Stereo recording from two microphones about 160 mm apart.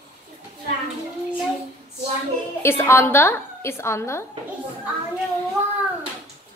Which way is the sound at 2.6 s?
15° left (ahead or behind).